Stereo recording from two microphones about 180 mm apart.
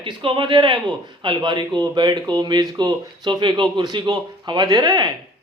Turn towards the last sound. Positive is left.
turn(degrees=-25)  # may be behind; listen again after turning